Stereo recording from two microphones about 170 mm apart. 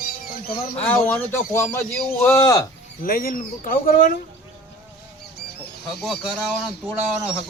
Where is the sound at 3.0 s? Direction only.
55° left (ahead or behind).